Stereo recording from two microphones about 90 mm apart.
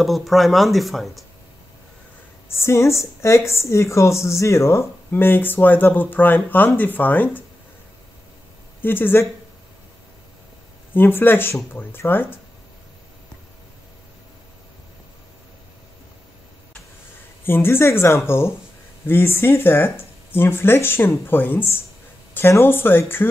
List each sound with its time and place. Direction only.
0.0 s speech: centre (ahead or behind)
2.4 s a woman's voice: 30° left (ahead or behind)
8.8 s a woman's voice: 25° left (ahead or behind)
10.9 s a woman's voice: 25° left (ahead or behind)
17.5 s a woman's voice: 25° left (ahead or behind)